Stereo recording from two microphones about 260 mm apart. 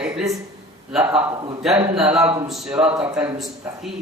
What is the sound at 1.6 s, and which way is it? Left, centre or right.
A man's voice, centre.